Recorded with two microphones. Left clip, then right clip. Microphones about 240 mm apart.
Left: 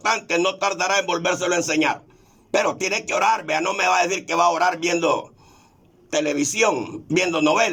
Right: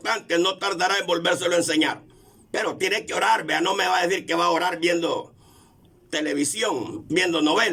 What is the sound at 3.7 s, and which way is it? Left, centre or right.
Speech, left.